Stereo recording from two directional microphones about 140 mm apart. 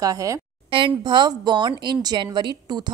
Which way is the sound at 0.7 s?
40° right (ahead or behind).